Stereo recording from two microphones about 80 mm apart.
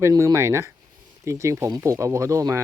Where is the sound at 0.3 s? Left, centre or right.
Right.